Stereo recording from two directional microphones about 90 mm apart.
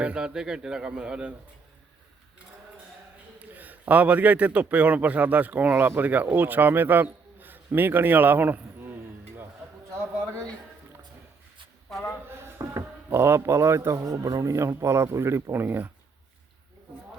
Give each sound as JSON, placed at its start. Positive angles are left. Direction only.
{"t": 0.0, "sound": "a man's voice", "side_deg": -10}
{"t": 3.3, "sound": "a man's voice", "side_deg": -20}
{"t": 12.3, "sound": "a sound", "side_deg": -25}
{"t": 13.1, "sound": "a man's voice", "side_deg": -25}